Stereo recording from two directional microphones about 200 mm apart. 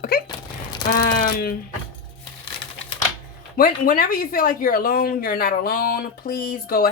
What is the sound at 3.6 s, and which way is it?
Speech, 45° left (ahead or behind).